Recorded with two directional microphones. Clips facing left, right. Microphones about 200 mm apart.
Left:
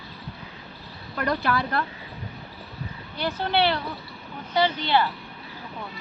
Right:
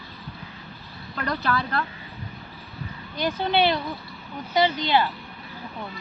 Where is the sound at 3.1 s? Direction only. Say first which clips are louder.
Right 2 dB; 15° right (ahead or behind).